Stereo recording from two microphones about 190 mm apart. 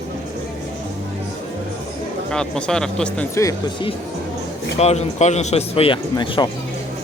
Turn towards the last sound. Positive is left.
turn(degrees=25)  # may be behind; listen again after turning